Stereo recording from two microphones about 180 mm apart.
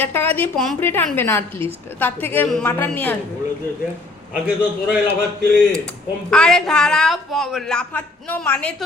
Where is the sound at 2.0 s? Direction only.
10° left (ahead or behind).